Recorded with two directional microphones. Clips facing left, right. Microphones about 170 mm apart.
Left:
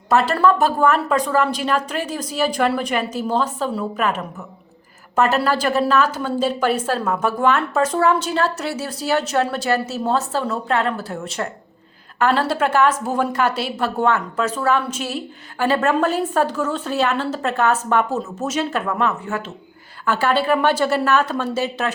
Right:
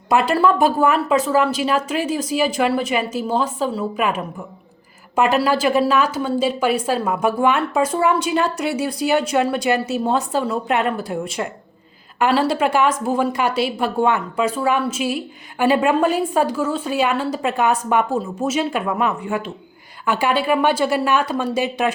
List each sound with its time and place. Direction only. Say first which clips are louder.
0.1 s a woman's voice: even; 15° right (ahead or behind)